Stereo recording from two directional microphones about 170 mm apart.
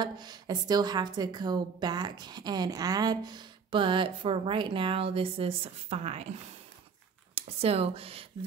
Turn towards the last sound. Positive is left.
turn(degrees=-35)  # may be behind; listen again after turning